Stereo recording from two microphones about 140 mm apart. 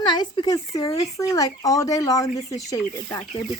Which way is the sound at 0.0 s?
30° left (ahead or behind).